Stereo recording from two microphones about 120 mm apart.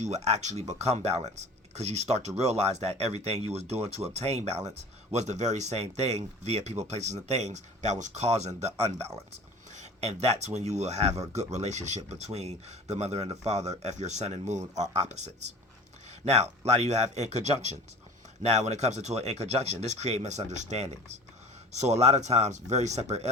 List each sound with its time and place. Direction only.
0.0 s speech: 70° right (ahead or behind)
5.1 s speech: 75° right (ahead or behind)
8.8 s speech: 60° right (ahead or behind); by 12.0 s 75° right (ahead or behind)
12.2 s speech: 65° right (ahead or behind)